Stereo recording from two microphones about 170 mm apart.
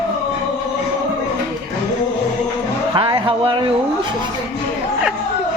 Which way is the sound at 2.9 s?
30° right (ahead or behind).